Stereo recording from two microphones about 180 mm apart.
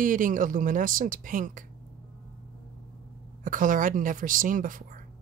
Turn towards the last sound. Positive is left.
turn(degrees=-50)  # may be behind; listen again after turning